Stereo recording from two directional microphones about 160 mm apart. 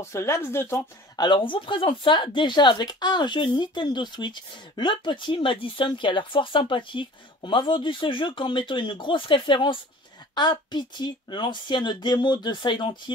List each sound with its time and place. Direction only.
0.0 s speech: 15° left (ahead or behind)